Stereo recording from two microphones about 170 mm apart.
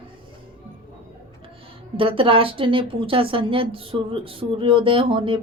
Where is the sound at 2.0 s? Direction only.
30° right (ahead or behind).